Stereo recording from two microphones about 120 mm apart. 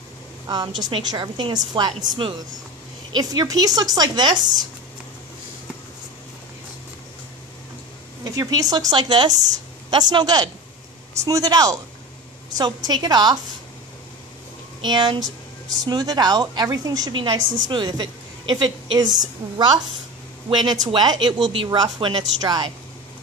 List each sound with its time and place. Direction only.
0.8 s a woman's voice: 40° right (ahead or behind)
8.2 s a woman's voice: 30° right (ahead or behind)
14.8 s a woman's voice: 40° right (ahead or behind)